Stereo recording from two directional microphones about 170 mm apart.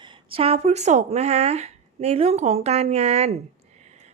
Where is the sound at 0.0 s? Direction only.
30° right (ahead or behind).